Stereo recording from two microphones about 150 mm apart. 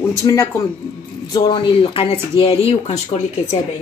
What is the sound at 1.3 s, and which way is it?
Speech, 35° left (ahead or behind).